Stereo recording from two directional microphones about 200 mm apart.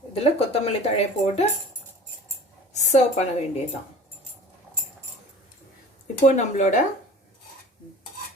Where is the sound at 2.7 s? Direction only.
35° left (ahead or behind).